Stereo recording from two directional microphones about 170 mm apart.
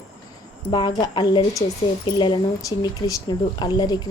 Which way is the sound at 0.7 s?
25° left (ahead or behind).